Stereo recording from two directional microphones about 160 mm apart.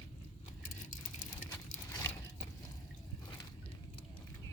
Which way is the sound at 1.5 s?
15° left (ahead or behind).